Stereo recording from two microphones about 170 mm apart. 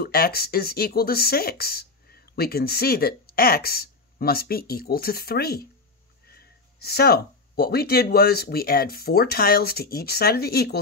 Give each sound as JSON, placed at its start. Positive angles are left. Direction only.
{"t": 0.0, "sound": "speech", "side_deg": 65}